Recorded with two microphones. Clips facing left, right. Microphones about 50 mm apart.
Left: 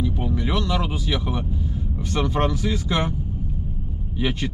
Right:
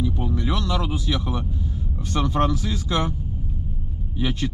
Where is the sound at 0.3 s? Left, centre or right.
Left.